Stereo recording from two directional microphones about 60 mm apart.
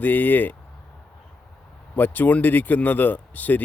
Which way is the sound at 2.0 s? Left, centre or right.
Left.